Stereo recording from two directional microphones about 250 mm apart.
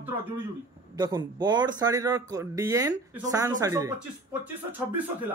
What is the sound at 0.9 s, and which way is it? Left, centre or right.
Speech, centre.